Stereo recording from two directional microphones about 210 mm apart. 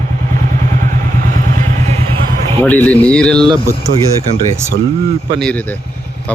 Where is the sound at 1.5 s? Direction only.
30° right (ahead or behind).